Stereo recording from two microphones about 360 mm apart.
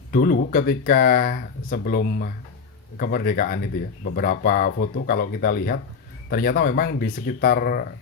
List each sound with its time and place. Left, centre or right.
0.1 s speech: left